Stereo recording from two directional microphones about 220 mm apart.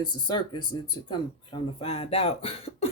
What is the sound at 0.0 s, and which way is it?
Speech, 20° left (ahead or behind).